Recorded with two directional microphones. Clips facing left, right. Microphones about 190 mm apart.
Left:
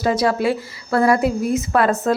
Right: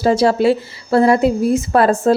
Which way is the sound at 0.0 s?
30° right (ahead or behind).